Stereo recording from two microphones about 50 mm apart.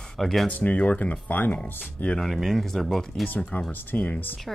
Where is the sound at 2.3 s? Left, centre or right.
Centre.